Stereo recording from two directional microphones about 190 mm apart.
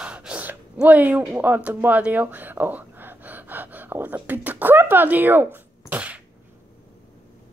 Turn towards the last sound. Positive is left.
turn(degrees=-10)  # may be behind; listen again after turning